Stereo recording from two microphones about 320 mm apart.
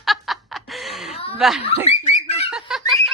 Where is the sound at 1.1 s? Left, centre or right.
Centre.